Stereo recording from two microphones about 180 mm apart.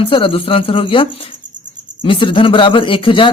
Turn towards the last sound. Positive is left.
turn(degrees=30)  # may be behind; listen again after turning